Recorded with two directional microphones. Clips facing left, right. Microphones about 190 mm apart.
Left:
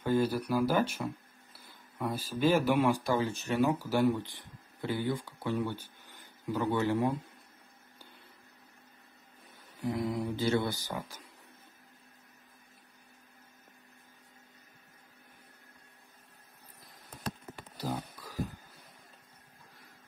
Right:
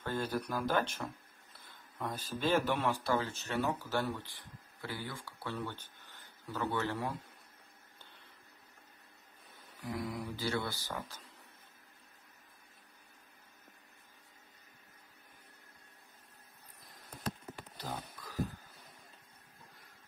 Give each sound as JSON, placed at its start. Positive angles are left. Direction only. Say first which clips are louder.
{"t": 0.0, "sound": "speech", "louder": "left 7 dB", "side_deg": 10}
{"t": 9.8, "sound": "speech", "louder": "left 7 dB", "side_deg": 25}
{"t": 17.7, "sound": "a sound", "louder": "left 8 dB", "side_deg": 10}